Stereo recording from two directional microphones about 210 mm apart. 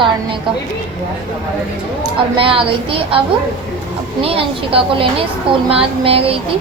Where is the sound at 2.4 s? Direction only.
25° right (ahead or behind).